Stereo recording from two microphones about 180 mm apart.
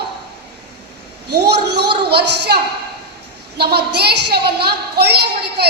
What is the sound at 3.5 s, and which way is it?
A woman's voice, 60° right (ahead or behind).